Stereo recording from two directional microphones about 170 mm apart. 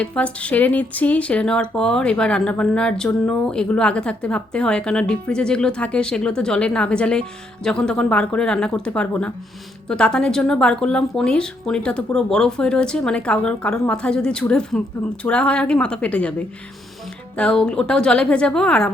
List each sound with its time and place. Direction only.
0.0 s speech: 5° left (ahead or behind)
17.3 s speech: 5° left (ahead or behind)